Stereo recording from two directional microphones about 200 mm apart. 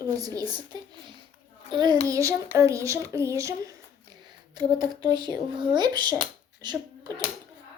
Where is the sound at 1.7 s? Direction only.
20° right (ahead or behind).